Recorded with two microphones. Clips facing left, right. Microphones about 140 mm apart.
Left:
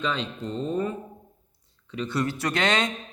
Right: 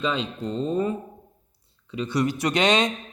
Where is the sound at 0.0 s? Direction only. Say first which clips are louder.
Right 3 dB; 10° right (ahead or behind).